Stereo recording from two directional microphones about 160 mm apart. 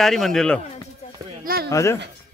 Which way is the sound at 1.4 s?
75° right (ahead or behind).